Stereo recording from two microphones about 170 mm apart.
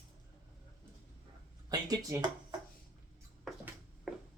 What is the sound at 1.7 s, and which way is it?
Speech, 20° right (ahead or behind).